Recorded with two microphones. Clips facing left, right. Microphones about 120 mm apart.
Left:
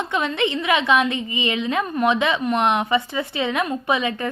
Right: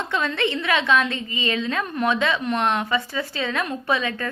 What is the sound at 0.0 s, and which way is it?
A woman's voice, 15° left (ahead or behind).